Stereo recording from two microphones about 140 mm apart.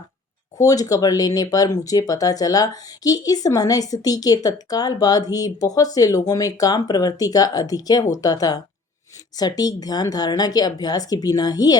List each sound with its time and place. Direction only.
0.6 s speech: 25° left (ahead or behind)